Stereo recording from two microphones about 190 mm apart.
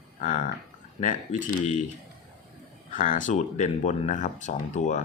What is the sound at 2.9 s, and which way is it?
Speech, 45° left (ahead or behind).